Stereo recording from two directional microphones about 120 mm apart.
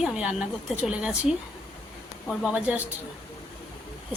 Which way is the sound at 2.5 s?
10° right (ahead or behind).